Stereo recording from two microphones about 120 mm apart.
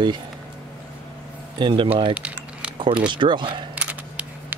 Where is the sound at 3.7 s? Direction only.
10° right (ahead or behind).